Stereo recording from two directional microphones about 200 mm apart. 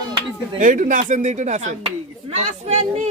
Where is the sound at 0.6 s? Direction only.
40° right (ahead or behind).